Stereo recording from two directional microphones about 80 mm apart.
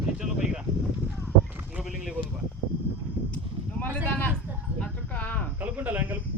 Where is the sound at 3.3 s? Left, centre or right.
Centre.